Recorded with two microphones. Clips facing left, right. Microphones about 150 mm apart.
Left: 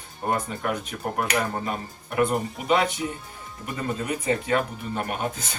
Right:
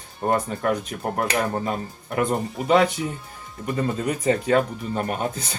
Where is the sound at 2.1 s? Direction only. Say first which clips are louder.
Even; 35° right (ahead or behind).